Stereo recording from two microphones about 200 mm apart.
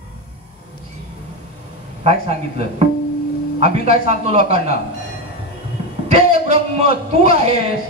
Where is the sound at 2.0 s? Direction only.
30° right (ahead or behind).